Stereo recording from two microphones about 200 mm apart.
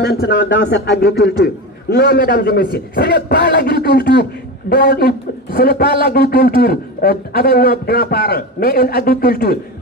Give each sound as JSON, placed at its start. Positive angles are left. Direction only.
{"t": 0.0, "sound": "a man's voice", "side_deg": 55}